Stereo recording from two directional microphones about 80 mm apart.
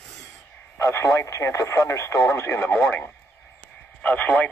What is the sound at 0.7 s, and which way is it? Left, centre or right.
Speech, left.